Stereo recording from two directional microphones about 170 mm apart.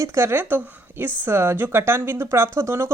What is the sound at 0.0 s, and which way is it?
Speech, 15° right (ahead or behind).